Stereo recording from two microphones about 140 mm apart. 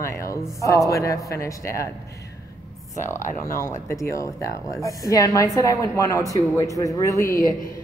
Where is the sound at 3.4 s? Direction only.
20° left (ahead or behind).